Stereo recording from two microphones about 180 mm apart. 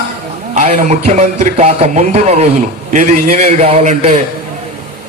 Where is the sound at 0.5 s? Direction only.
40° right (ahead or behind).